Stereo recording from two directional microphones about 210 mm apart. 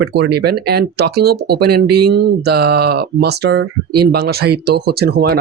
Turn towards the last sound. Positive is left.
turn(degrees=-50)  # may be behind; listen again after turning